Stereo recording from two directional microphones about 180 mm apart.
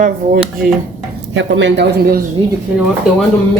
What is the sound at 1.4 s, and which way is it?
Speech, 85° right.